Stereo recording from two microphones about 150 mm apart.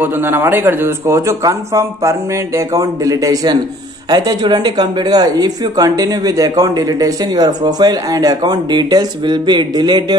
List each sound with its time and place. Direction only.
0.0 s a woman's voice: 15° right (ahead or behind); by 10.1 s 30° right (ahead or behind)